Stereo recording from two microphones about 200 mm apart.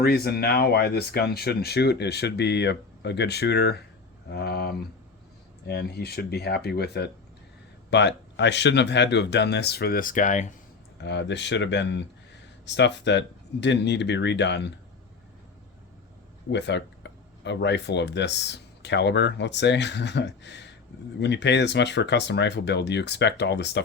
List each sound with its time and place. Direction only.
0.0 s speech: 50° left (ahead or behind)
11.0 s speech: 60° left (ahead or behind)
16.5 s speech: 60° left (ahead or behind)